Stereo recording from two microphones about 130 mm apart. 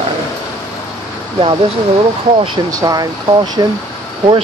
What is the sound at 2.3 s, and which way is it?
Speech, 35° right (ahead or behind).